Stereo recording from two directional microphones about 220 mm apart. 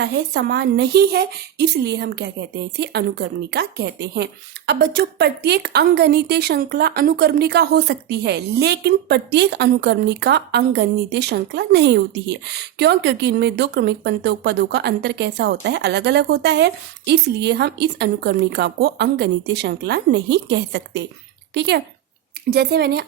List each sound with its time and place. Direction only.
0.0 s speech: 50° right (ahead or behind)